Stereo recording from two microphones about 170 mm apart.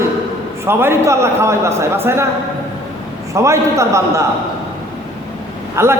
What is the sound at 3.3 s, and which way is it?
Speech, 15° right (ahead or behind).